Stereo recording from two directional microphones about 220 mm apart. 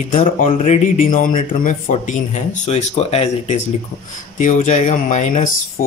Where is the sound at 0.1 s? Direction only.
30° left (ahead or behind).